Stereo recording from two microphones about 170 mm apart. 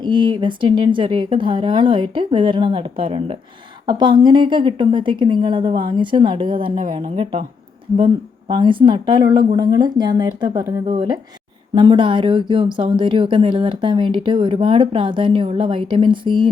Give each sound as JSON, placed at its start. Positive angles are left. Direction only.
{"t": 0.0, "sound": "speech", "side_deg": -30}